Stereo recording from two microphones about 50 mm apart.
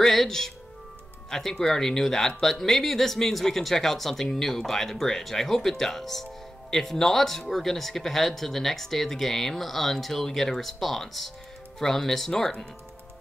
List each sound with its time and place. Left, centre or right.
0.0 s speech: centre